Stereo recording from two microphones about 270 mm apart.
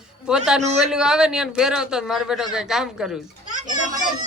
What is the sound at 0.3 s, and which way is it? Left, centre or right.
A man's voice, centre.